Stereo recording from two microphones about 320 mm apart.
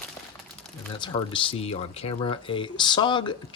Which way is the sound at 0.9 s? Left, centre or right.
Centre.